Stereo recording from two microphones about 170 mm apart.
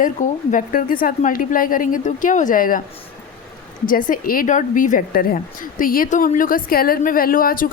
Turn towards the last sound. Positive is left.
turn(degrees=55)  # may be behind; listen again after turning